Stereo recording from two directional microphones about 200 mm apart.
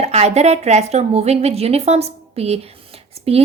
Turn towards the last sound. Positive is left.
turn(degrees=-30)  # may be behind; listen again after turning